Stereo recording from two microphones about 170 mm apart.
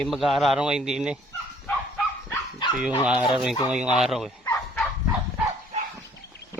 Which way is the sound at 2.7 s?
5° right (ahead or behind).